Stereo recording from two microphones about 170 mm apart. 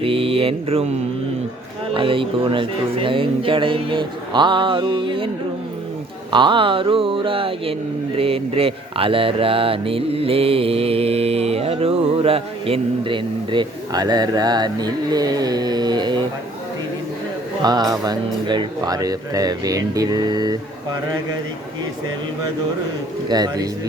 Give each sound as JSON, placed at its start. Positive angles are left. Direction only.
{"t": 0.0, "sound": "mantra", "side_deg": -35}
{"t": 1.9, "sound": "speech", "side_deg": -30}
{"t": 6.3, "sound": "speech", "side_deg": -30}
{"t": 17.6, "sound": "speech", "side_deg": -25}
{"t": 23.3, "sound": "speech", "side_deg": -25}